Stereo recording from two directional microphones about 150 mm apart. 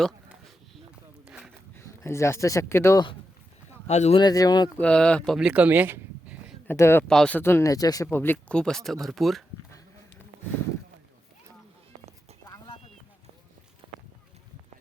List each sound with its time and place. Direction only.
1.7 s speech: 15° left (ahead or behind)
3.8 s speech: 50° left (ahead or behind)
4.2 s speech: 25° left (ahead or behind)
4.8 s speech: 5° left (ahead or behind); by 6.3 s 10° right (ahead or behind)
6.7 s speech: 15° left (ahead or behind); by 9.4 s centre (ahead or behind)